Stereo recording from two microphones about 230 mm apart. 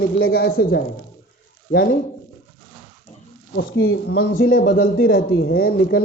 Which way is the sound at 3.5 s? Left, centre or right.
Left.